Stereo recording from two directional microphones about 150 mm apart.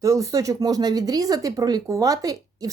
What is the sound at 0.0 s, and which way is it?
Speech, 20° right (ahead or behind).